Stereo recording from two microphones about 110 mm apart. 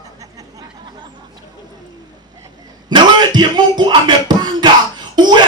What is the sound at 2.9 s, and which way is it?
Speech, 45° right (ahead or behind).